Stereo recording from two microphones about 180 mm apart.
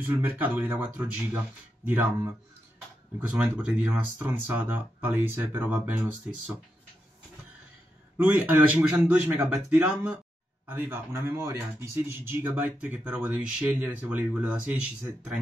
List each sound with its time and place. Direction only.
0.0 s a man's voice: 10° right (ahead or behind)
8.2 s a man's voice: 10° right (ahead or behind)